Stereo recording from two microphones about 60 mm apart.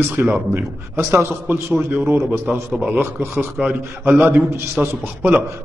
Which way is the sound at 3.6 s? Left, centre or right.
Right.